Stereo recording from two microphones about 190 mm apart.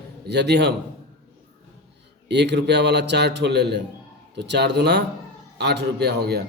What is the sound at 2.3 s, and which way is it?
A man's voice, 65° right (ahead or behind).